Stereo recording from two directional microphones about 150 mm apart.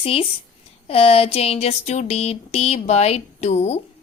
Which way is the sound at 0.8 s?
40° left (ahead or behind).